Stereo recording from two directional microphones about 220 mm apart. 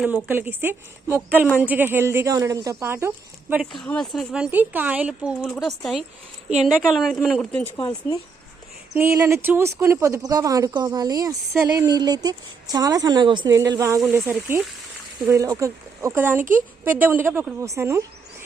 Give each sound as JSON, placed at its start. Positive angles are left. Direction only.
{"t": 0.0, "sound": "speech", "side_deg": -10}
{"t": 3.5, "sound": "speech", "side_deg": 0}
{"t": 7.8, "sound": "speech", "side_deg": 20}
{"t": 9.0, "sound": "speech", "side_deg": -10}
{"t": 14.0, "sound": "speech", "side_deg": -5}
{"t": 16.4, "sound": "speech", "side_deg": -35}
{"t": 16.8, "sound": "speech", "side_deg": -10}